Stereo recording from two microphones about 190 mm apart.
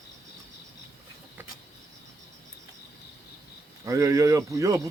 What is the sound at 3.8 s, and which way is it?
Speech, 15° right (ahead or behind).